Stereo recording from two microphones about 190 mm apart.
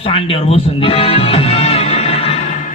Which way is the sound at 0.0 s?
30° left (ahead or behind).